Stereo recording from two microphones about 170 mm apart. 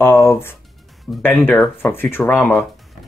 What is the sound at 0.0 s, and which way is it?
Speech, 15° left (ahead or behind).